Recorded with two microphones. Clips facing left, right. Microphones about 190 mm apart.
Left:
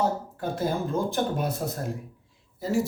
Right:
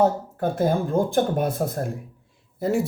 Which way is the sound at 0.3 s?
50° right (ahead or behind).